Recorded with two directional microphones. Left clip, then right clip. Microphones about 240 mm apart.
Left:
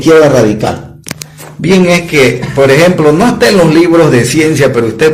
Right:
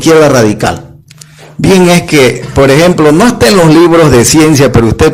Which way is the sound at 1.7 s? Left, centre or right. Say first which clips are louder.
Right 2 dB; right.